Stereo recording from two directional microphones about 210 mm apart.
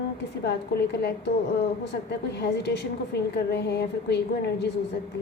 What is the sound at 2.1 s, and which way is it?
A woman's voice, 55° left (ahead or behind).